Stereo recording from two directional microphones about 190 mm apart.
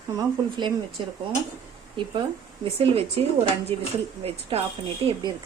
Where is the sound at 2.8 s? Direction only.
30° right (ahead or behind).